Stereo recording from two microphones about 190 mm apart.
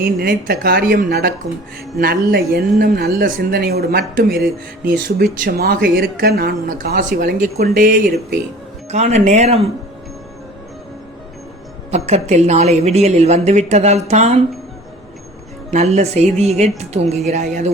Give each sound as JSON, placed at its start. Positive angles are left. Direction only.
{"t": 0.0, "sound": "speech", "side_deg": -50}
{"t": 8.9, "sound": "a woman's voice", "side_deg": -35}
{"t": 11.9, "sound": "a woman's voice", "side_deg": -35}
{"t": 15.7, "sound": "a woman's voice", "side_deg": -35}